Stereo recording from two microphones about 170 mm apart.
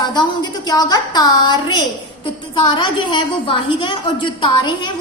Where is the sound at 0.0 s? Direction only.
25° left (ahead or behind).